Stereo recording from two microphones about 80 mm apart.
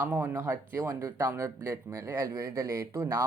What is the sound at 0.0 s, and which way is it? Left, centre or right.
Speech, right.